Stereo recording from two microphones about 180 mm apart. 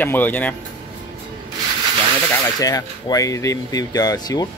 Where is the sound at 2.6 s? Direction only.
20° left (ahead or behind).